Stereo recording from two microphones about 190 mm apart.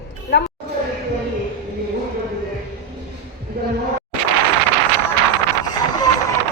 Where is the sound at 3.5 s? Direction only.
55° right (ahead or behind).